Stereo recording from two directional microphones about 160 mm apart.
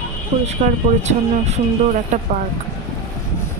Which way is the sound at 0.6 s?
45° right (ahead or behind).